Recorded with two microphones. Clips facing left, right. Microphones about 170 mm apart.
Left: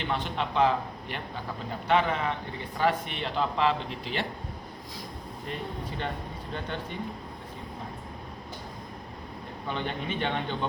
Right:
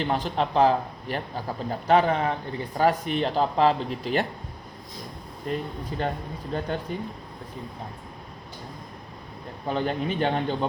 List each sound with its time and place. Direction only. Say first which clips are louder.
0.0 s speech: right 5 dB; 40° right (ahead or behind)
5.5 s speech: right 6 dB; 40° right (ahead or behind)
9.6 s speech: right 6 dB; 40° right (ahead or behind)